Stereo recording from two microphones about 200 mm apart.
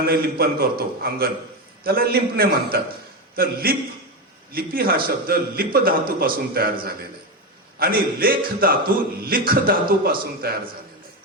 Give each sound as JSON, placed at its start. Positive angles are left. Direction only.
{"t": 0.0, "sound": "a man's voice", "side_deg": -50}
{"t": 7.8, "sound": "a man's voice", "side_deg": -45}